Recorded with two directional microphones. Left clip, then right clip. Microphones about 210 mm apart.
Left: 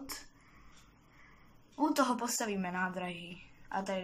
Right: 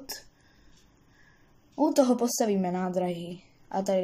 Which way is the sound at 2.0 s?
35° right (ahead or behind).